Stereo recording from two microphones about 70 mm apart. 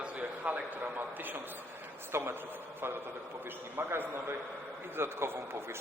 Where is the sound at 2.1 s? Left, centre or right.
Right.